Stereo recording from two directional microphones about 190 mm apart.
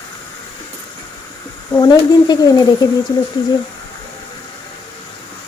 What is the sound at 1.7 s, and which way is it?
Speech, 20° left (ahead or behind).